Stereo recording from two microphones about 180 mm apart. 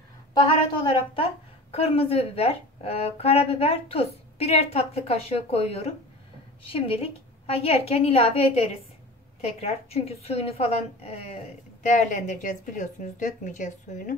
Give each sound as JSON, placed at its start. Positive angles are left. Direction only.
{"t": 0.8, "sound": "a woman's voice", "side_deg": 30}